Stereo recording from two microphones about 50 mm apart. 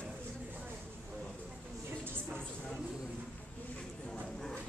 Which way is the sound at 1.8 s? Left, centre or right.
Right.